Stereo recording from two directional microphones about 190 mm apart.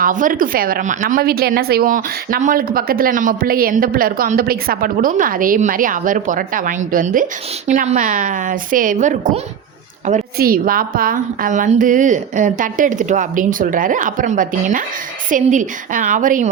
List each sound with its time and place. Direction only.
0.0 s a woman's voice: 45° right (ahead or behind)